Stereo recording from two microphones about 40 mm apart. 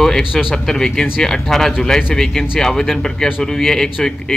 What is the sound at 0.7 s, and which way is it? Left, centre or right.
Speech, centre.